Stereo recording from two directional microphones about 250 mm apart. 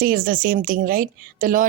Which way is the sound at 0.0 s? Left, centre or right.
Right.